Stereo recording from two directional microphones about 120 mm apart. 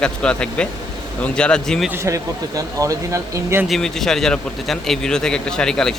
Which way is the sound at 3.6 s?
Centre (ahead or behind).